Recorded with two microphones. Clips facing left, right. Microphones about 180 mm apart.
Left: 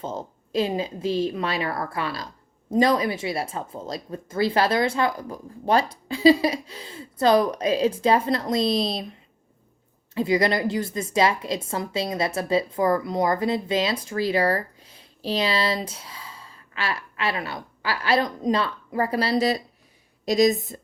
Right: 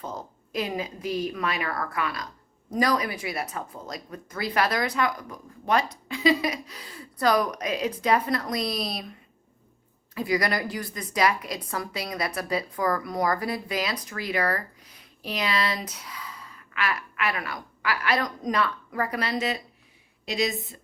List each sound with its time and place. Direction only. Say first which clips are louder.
0.0 s a woman's voice: left 4 dB; 25° left (ahead or behind)
10.2 s a woman's voice: left 5 dB; 25° left (ahead or behind); by 20.8 s 40° left (ahead or behind)